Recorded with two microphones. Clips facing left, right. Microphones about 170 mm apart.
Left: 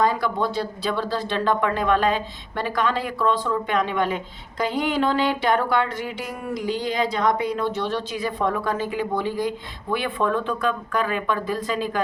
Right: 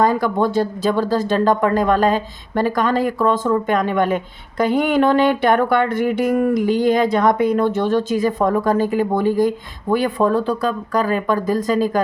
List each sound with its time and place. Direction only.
0.0 s speech: 45° right (ahead or behind)